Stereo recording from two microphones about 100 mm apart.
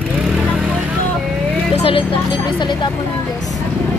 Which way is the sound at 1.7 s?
65° left (ahead or behind).